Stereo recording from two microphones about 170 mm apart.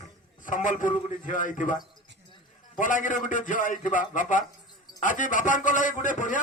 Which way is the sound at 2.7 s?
50° left (ahead or behind).